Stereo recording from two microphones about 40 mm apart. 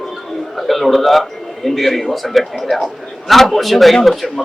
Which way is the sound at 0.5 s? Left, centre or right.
Centre.